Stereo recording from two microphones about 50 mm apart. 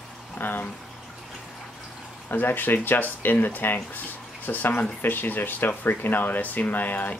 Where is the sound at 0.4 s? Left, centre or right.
Left.